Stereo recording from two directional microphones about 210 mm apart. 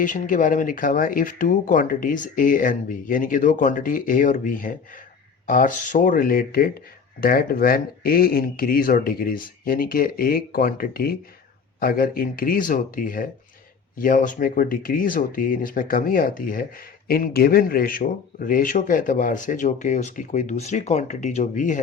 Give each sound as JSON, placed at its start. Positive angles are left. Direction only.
{"t": 0.0, "sound": "speech", "side_deg": 40}